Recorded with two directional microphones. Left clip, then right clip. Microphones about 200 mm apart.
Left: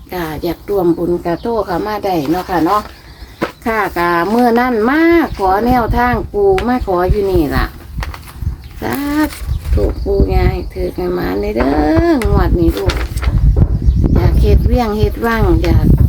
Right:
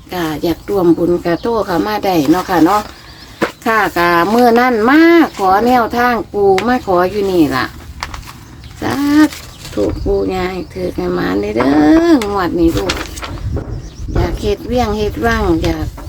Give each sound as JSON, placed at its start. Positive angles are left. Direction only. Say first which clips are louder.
{"t": 0.1, "sound": "speech", "louder": "right 3 dB", "side_deg": -5}
{"t": 1.2, "sound": "speech", "louder": "right 1 dB", "side_deg": -20}
{"t": 3.4, "sound": "speech", "louder": "right 3 dB", "side_deg": -10}
{"t": 8.8, "sound": "speech", "louder": "right 4 dB", "side_deg": -5}
{"t": 12.7, "sound": "vehicle", "louder": "right 1 dB", "side_deg": 0}
{"t": 14.2, "sound": "speech", "louder": "right 2 dB", "side_deg": -5}